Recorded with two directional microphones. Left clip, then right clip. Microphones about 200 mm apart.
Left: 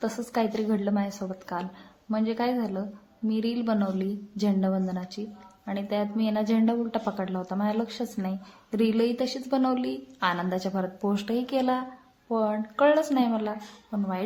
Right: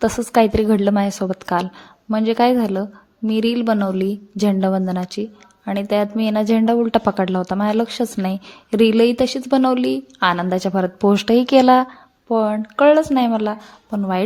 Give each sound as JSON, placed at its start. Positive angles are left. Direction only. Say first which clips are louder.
{"t": 0.0, "sound": "a woman's voice", "louder": "right 13 dB", "side_deg": -40}